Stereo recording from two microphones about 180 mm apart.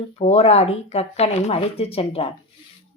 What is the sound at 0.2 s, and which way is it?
Speech, 35° left (ahead or behind).